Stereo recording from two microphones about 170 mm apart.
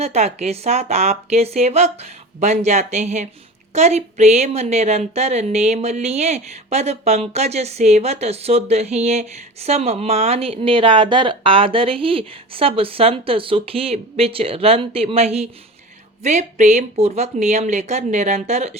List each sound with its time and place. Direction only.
0.0 s a woman's voice: 40° right (ahead or behind)